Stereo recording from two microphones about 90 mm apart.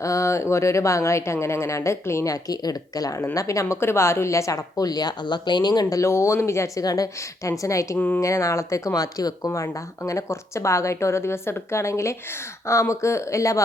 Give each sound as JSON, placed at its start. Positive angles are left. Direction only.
{"t": 0.0, "sound": "a woman's voice", "side_deg": 35}
{"t": 5.8, "sound": "a woman's voice", "side_deg": 35}
{"t": 7.9, "sound": "speech", "side_deg": 15}
{"t": 8.2, "sound": "a woman's voice", "side_deg": 35}